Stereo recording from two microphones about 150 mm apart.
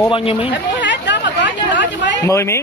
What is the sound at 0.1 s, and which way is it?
Speech, 40° left (ahead or behind).